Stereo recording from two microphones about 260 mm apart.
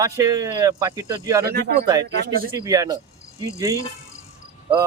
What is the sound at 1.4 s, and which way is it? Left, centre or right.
Speech, right.